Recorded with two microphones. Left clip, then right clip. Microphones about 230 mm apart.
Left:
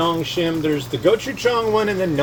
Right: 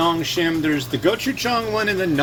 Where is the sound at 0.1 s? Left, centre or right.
Right.